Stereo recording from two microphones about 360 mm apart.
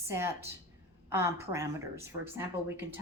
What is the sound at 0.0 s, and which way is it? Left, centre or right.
Speech, centre.